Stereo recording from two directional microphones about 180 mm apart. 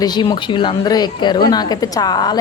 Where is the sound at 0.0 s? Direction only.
25° left (ahead or behind).